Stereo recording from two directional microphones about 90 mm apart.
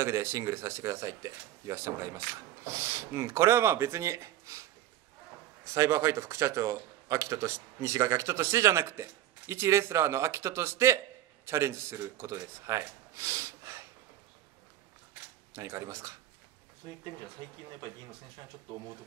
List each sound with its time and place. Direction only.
0.0 s a man's voice: 30° right (ahead or behind)
15.5 s a man's voice: 30° right (ahead or behind)
16.8 s speech: 60° right (ahead or behind)
18.7 s speech: 55° right (ahead or behind)